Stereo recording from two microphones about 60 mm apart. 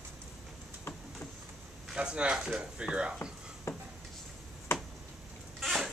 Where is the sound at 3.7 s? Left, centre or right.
Left.